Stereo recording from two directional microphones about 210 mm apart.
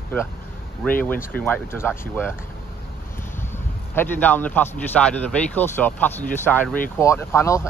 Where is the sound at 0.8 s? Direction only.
Centre (ahead or behind).